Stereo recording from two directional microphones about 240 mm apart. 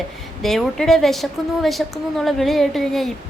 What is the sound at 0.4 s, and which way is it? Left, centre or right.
A woman's voice, centre.